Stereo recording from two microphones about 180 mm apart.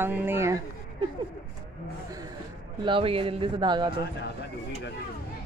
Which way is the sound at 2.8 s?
30° right (ahead or behind).